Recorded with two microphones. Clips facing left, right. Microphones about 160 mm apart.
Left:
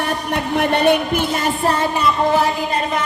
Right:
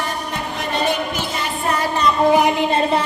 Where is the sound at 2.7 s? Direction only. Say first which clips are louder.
Right 3 dB; 30° right (ahead or behind).